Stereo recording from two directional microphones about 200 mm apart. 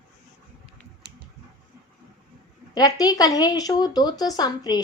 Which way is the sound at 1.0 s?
55° right (ahead or behind).